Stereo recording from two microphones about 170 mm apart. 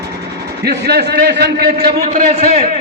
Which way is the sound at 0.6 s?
70° right (ahead or behind).